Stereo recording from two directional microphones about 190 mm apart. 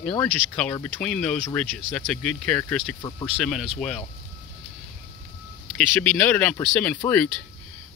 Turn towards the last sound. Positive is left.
turn(degrees=5)  # may be behind; listen again after turning